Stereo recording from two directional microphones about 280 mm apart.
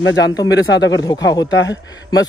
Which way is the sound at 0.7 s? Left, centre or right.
Left.